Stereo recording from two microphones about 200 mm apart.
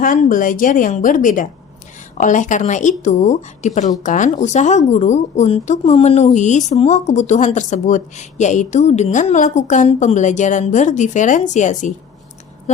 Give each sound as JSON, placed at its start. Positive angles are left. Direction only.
{"t": 0.0, "sound": "speech", "side_deg": 40}